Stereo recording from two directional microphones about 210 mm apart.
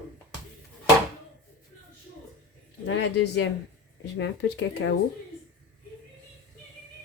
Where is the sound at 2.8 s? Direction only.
55° left (ahead or behind).